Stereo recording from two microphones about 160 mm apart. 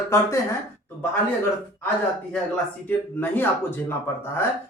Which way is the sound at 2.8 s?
10° left (ahead or behind).